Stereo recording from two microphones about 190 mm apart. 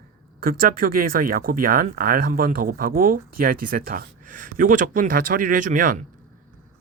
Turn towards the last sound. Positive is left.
turn(degrees=-45)  # may be behind; listen again after turning